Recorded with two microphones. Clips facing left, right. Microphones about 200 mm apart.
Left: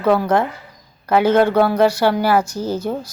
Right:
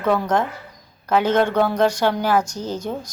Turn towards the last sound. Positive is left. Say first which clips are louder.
# left 4 dB
turn(degrees=10)  # may be behind; listen again after turning